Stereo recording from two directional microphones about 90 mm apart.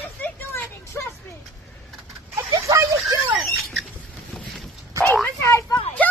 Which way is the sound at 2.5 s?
35° right (ahead or behind).